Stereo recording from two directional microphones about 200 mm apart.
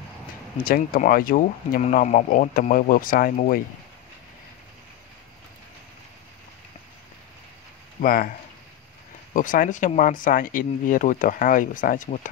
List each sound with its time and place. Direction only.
0.7 s speech: 45° left (ahead or behind)
8.0 s speech: 45° left (ahead or behind)